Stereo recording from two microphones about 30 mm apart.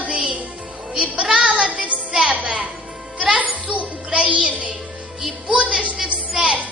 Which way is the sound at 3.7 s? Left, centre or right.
Right.